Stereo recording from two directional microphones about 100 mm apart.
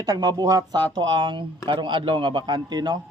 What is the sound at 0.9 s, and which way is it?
A man's voice, 55° right (ahead or behind).